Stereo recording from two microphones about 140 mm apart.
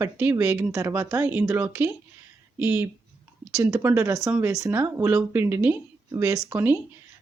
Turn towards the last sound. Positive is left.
turn(degrees=-15)  # may be behind; listen again after turning